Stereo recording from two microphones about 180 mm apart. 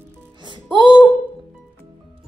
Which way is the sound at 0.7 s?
25° right (ahead or behind).